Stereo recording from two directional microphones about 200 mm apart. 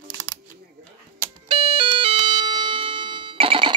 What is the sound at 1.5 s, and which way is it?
Music, 25° right (ahead or behind).